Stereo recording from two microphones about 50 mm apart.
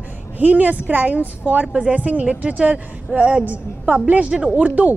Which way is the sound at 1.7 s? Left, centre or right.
Right.